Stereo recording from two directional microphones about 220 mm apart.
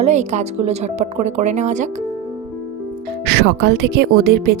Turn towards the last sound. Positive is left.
turn(degrees=-45)  # may be behind; listen again after turning